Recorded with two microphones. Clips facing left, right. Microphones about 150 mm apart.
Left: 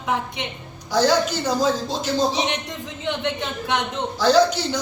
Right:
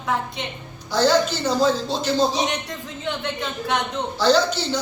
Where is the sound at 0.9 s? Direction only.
10° left (ahead or behind).